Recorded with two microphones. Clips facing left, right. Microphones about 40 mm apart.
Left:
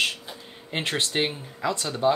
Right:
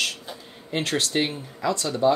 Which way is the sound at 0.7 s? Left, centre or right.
Left.